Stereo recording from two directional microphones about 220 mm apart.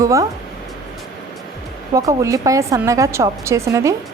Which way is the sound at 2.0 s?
15° right (ahead or behind).